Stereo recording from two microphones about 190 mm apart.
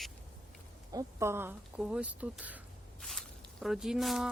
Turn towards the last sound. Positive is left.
turn(degrees=0)  # may be behind; listen again after turning